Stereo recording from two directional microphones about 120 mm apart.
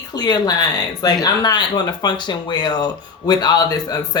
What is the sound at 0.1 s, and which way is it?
Speech, 35° left (ahead or behind).